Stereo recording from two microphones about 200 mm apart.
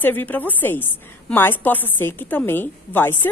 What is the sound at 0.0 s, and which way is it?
A woman's voice, 10° left (ahead or behind).